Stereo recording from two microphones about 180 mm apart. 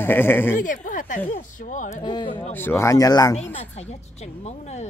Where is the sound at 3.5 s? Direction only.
40° left (ahead or behind).